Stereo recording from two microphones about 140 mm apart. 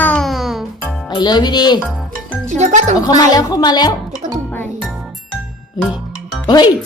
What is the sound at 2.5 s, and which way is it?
Speech, 60° right (ahead or behind).